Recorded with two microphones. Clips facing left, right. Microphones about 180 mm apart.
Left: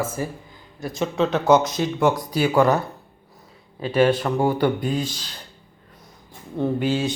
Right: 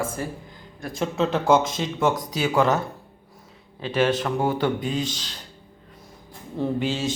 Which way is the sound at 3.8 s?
5° left (ahead or behind).